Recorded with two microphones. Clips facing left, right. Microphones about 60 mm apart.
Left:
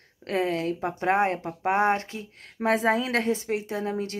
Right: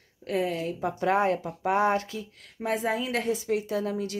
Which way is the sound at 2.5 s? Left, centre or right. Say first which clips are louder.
Left 5 dB; left.